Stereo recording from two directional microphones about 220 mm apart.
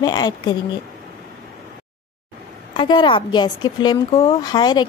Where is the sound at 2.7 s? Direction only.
20° left (ahead or behind).